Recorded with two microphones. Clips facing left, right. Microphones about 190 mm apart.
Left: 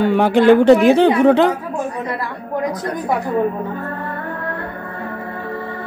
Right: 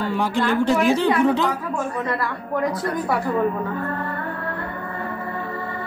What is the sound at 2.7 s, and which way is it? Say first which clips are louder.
Speech: left 2 dB; 20° left (ahead or behind).